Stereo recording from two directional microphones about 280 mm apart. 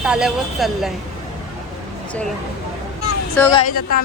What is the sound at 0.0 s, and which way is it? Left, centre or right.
Speech, centre.